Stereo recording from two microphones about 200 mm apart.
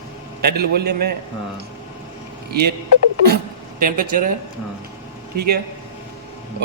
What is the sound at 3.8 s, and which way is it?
Speech, 45° right (ahead or behind).